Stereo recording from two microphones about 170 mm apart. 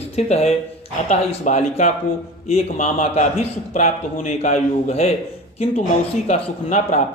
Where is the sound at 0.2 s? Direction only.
40° left (ahead or behind).